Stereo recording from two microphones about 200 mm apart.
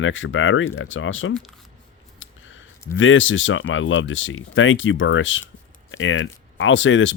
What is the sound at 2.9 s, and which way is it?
Speech, 75° left (ahead or behind).